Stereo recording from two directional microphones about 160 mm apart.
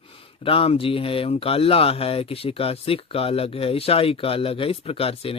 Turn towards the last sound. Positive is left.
turn(degrees=35)  # may be behind; listen again after turning